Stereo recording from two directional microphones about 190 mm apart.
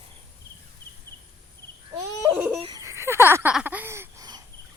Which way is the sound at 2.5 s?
30° right (ahead or behind).